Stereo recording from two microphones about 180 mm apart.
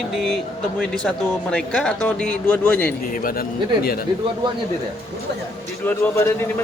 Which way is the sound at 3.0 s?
50° left (ahead or behind).